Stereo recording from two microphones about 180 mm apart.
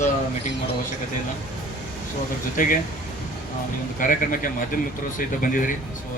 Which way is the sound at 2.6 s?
45° left (ahead or behind).